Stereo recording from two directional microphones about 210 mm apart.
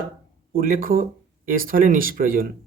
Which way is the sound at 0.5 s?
45° right (ahead or behind).